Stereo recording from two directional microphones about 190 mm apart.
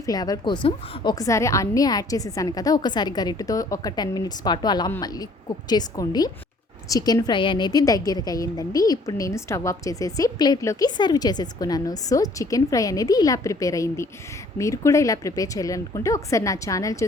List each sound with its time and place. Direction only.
0.0 s a woman's voice: 20° left (ahead or behind)